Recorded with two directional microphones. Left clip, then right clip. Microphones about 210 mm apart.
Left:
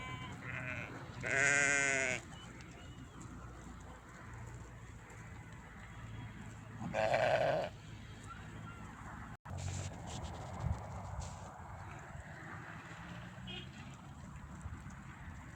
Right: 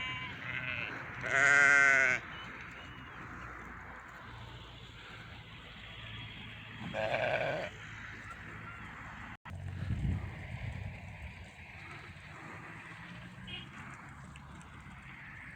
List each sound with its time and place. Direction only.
0.0 s sheep: 55° left (ahead or behind)
0.9 s sheep: 5° left (ahead or behind)
1.2 s sheep: 40° right (ahead or behind)
6.9 s sheep: 5° right (ahead or behind)